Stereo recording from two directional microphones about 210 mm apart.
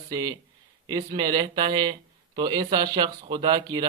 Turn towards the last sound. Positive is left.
turn(degrees=-20)  # may be behind; listen again after turning